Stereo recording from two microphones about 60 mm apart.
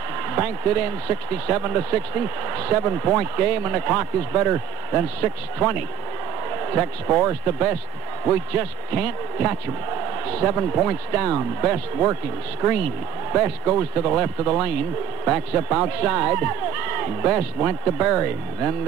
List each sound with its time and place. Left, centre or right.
0.3 s a man's voice: right
13.3 s speech: right